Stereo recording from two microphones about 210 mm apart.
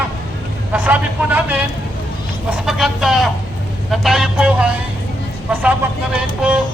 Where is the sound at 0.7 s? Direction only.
5° right (ahead or behind).